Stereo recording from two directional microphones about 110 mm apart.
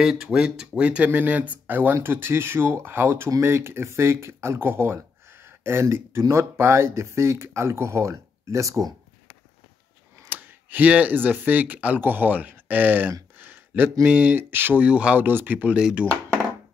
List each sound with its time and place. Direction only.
0.0 s speech: 5° right (ahead or behind); by 8.9 s 30° right (ahead or behind)
10.2 s speech: 15° right (ahead or behind)
13.4 s a sound: 20° right (ahead or behind)
14.0 s speech: 15° right (ahead or behind)